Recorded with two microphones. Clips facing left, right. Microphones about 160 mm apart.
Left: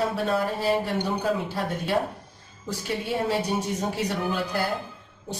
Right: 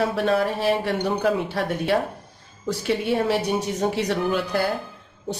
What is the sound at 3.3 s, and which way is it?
A man's voice, 75° right (ahead or behind).